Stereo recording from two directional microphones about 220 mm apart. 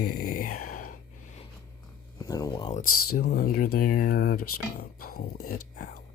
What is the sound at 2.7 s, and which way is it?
Speech, 40° left (ahead or behind).